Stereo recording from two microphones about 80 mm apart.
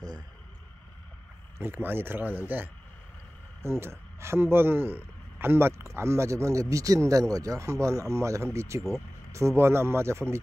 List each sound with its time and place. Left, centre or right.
1.6 s speech: right